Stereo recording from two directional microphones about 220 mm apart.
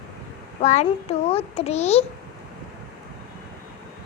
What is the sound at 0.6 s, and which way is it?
A child's voice, 30° left (ahead or behind).